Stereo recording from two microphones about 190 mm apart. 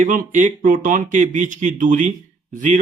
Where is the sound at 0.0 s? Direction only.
45° right (ahead or behind).